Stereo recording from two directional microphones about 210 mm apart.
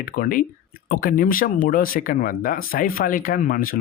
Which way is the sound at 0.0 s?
45° left (ahead or behind).